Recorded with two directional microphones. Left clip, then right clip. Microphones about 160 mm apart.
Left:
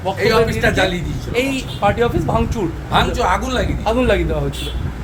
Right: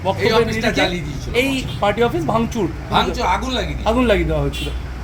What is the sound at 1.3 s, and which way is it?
Speech, 50° right (ahead or behind).